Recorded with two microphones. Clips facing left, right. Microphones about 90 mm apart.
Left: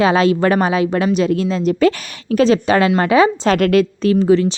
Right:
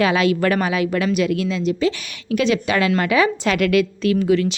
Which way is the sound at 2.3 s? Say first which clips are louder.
Left 5 dB; 35° left (ahead or behind).